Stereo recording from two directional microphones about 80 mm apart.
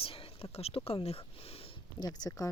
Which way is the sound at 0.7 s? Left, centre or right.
Left.